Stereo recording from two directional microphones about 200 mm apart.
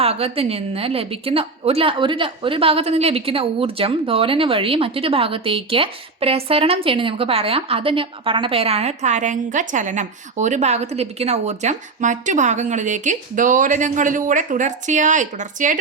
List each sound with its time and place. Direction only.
0.0 s a woman's voice: 30° right (ahead or behind)